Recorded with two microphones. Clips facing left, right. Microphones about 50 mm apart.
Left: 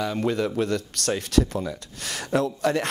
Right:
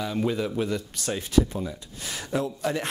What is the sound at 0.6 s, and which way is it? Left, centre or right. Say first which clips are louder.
Speech: left 3 dB; left.